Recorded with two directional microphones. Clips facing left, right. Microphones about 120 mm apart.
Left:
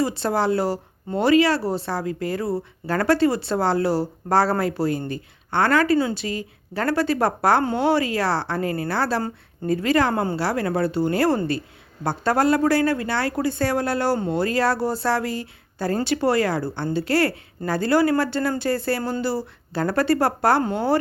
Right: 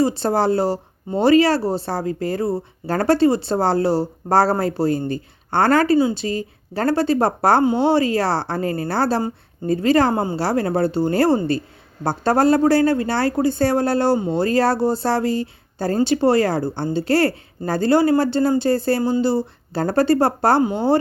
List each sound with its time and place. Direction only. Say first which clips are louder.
0.0 s a woman's voice: right 4 dB; 30° right (ahead or behind)